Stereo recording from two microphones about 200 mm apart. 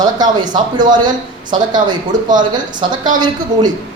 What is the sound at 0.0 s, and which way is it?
Speech, 20° right (ahead or behind).